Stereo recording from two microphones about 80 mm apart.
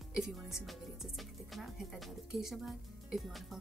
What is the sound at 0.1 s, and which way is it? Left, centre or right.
Speech, centre.